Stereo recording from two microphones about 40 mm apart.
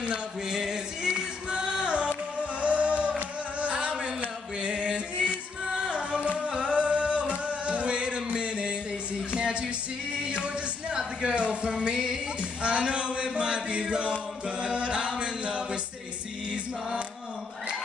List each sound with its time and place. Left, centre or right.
0.5 s music: centre
11.1 s a sound: right
11.6 s music: right
14.6 s a capella: right